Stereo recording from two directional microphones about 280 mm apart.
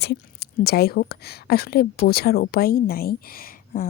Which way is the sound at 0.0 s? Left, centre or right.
Left.